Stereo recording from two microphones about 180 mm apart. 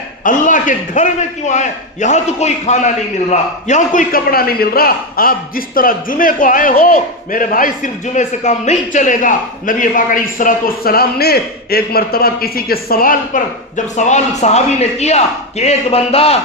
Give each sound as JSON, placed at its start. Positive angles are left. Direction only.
{"t": 0.3, "sound": "a man's voice", "side_deg": 45}